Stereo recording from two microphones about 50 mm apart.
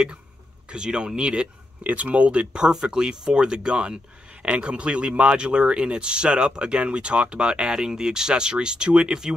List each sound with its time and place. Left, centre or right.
0.7 s speech: centre
1.8 s speech: right